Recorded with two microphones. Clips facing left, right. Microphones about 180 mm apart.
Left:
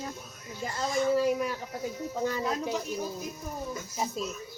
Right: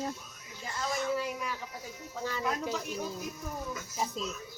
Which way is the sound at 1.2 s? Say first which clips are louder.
Left 8 dB; 45° left (ahead or behind).